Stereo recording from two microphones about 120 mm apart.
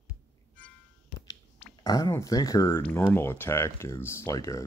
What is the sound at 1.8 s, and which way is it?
Speech, 30° left (ahead or behind).